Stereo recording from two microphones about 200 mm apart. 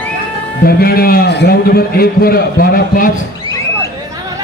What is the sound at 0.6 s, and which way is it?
A man's voice, 50° left (ahead or behind).